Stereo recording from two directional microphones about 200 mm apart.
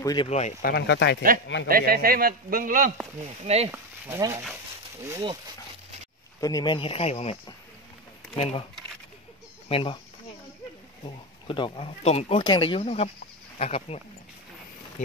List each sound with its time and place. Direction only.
0.0 s speech: 20° left (ahead or behind)
0.3 s speech: 35° left (ahead or behind)
0.6 s speech: 50° left (ahead or behind)
1.7 s a man's voice: 45° right (ahead or behind)
3.4 s speech: 30° right (ahead or behind)
3.7 s speech: 15° right (ahead or behind)
6.4 s speech: 20° left (ahead or behind)
8.4 s speech: 30° left (ahead or behind)
9.7 s speech: 25° left (ahead or behind)
11.1 s speech: 25° left (ahead or behind)